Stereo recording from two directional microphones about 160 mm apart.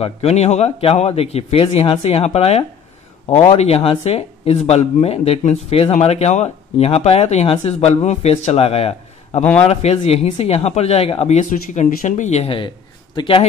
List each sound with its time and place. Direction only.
0.0 s speech: 40° left (ahead or behind)